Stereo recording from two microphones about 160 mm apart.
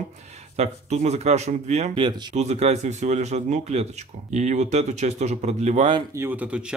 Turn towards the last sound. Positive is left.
turn(degrees=-5)  # may be behind; listen again after turning